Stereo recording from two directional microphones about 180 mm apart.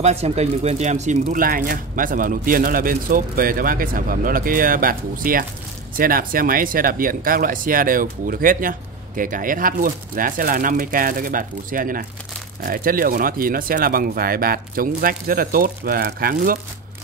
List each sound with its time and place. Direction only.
0.0 s speech: 35° right (ahead or behind); by 16.5 s 55° right (ahead or behind)